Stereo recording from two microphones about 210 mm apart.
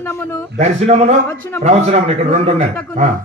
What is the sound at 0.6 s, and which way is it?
A man's voice, 30° right (ahead or behind).